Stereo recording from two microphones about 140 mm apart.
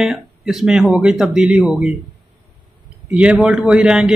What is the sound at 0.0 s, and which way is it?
A man's voice, 5° right (ahead or behind).